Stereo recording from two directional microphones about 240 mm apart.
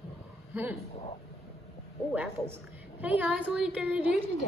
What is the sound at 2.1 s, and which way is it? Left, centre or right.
A woman's voice, centre.